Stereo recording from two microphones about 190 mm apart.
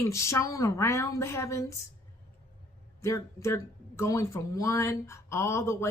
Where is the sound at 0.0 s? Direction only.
15° left (ahead or behind).